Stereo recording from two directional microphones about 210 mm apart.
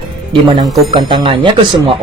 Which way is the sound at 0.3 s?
25° right (ahead or behind).